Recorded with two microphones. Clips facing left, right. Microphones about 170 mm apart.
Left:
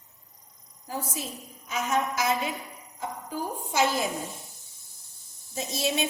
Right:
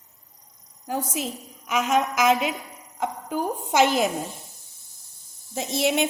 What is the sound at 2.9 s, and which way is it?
A woman's voice, 75° right (ahead or behind).